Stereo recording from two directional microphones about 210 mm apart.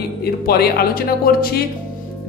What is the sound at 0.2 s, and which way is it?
Speech, 50° left (ahead or behind).